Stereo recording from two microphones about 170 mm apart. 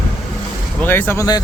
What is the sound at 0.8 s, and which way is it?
Speech, 10° left (ahead or behind).